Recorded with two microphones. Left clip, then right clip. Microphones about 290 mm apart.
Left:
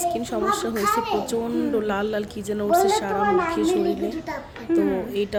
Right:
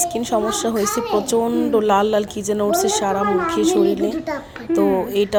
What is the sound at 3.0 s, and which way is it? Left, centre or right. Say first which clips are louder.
A woman's voice: right 3 dB; centre.